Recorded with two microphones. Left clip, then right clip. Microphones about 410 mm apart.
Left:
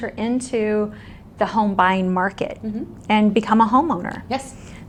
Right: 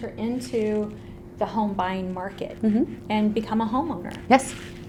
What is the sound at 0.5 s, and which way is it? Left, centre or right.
A woman's voice, left.